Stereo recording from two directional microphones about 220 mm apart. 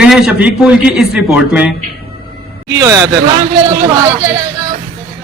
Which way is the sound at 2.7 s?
15° right (ahead or behind).